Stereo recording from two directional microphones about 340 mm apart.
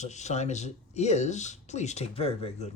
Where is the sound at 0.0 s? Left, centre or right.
Centre.